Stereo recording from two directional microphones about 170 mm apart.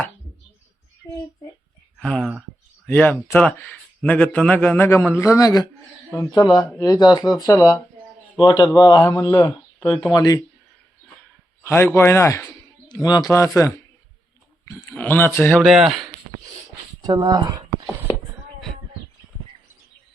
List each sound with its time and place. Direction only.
2.0 s speech: 5° left (ahead or behind); by 5.6 s 20° left (ahead or behind)
6.1 s speech: 10° left (ahead or behind)
6.4 s speech: 25° left (ahead or behind)
11.6 s a man's voice: 15° left (ahead or behind)
12.9 s speech: 25° left (ahead or behind)
15.6 s speech: centre (ahead or behind)
17.0 s speech: 25° right (ahead or behind)